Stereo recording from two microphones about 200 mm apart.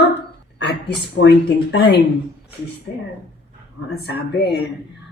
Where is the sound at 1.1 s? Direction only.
60° left (ahead or behind).